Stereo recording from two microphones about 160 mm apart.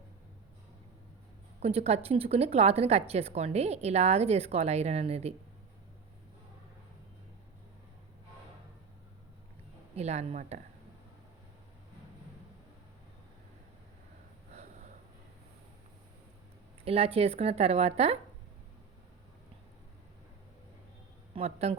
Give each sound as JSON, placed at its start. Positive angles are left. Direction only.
{"t": 1.6, "sound": "a woman's voice", "side_deg": -40}
{"t": 9.9, "sound": "speech", "side_deg": -45}
{"t": 16.8, "sound": "a woman's voice", "side_deg": -40}
{"t": 21.3, "sound": "a woman's voice", "side_deg": -40}